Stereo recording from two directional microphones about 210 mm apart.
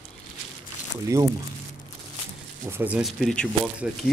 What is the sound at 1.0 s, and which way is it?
Speech, 15° right (ahead or behind).